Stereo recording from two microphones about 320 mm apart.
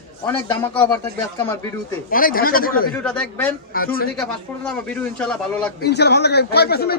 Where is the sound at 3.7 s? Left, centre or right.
Left.